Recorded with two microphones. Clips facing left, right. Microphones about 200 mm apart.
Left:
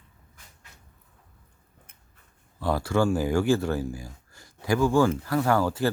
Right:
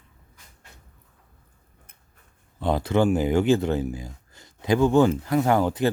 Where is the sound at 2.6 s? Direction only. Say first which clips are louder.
Right 3 dB; 20° right (ahead or behind).